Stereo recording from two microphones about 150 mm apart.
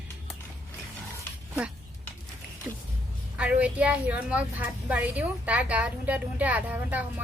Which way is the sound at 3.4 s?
10° right (ahead or behind).